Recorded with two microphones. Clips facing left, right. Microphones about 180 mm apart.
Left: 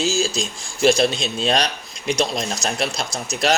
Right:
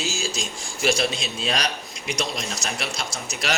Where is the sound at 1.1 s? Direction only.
5° right (ahead or behind).